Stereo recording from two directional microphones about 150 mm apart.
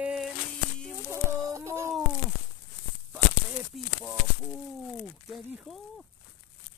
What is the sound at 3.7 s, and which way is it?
Speech, 5° right (ahead or behind).